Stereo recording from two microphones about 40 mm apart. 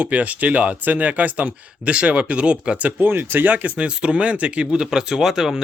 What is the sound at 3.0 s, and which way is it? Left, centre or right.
Speech, right.